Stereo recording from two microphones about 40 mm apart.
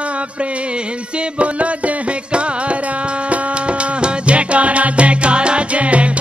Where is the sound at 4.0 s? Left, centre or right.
Right.